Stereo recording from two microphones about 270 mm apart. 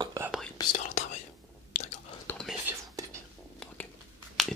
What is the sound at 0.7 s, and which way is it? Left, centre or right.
Whispering, left.